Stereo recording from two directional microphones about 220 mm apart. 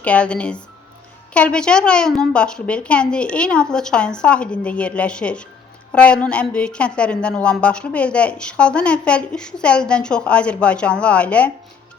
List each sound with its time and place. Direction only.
0.0 s a woman's voice: 5° left (ahead or behind)